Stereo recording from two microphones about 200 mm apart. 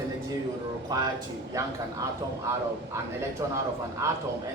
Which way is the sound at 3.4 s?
20° right (ahead or behind).